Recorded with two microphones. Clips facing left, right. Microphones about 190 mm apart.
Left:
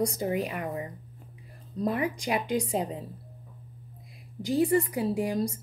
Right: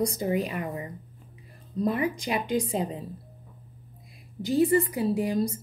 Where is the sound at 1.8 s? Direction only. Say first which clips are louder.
Right 1 dB; 10° left (ahead or behind).